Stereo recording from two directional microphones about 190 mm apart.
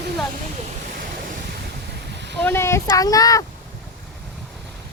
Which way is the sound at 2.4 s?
10° left (ahead or behind).